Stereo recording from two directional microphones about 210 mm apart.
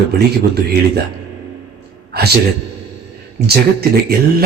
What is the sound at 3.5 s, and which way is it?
Speech, 45° right (ahead or behind).